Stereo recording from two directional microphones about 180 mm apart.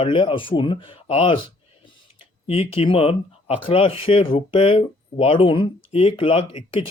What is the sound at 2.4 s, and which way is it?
Speech, 30° left (ahead or behind).